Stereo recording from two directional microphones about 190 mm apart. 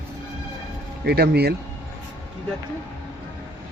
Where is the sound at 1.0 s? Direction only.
60° right (ahead or behind).